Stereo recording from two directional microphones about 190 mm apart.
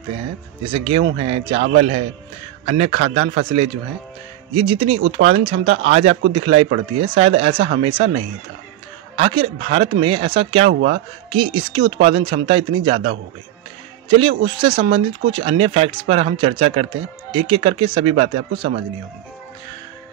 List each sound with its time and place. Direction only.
0.7 s speech: 30° right (ahead or behind)
2.6 s speech: 35° right (ahead or behind)
10.7 s a man's voice: 70° right (ahead or behind)
11.2 s speech: 25° right (ahead or behind)
14.0 s speech: 25° right (ahead or behind)